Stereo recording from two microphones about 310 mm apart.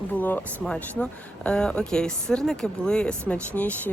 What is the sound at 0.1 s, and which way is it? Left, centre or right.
Speech, centre.